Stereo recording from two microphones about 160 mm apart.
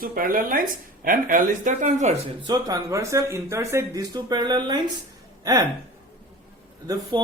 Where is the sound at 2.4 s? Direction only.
25° right (ahead or behind).